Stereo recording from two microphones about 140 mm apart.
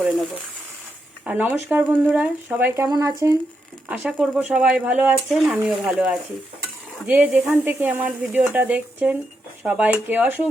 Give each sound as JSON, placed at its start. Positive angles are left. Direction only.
{"t": 1.2, "sound": "speech", "side_deg": -10}
{"t": 2.8, "sound": "speech", "side_deg": -25}
{"t": 3.8, "sound": "speech", "side_deg": -10}